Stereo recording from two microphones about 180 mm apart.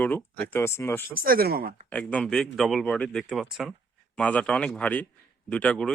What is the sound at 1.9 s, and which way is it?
Speech, 5° left (ahead or behind).